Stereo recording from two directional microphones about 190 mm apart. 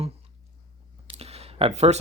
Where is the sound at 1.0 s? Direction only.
30° right (ahead or behind).